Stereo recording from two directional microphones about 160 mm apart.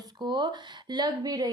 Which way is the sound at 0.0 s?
25° right (ahead or behind).